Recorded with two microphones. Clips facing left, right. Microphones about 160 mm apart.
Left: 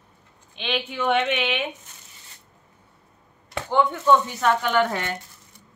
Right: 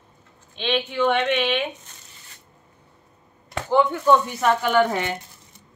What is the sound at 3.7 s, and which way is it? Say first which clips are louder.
Speech: right 1 dB; 5° right (ahead or behind).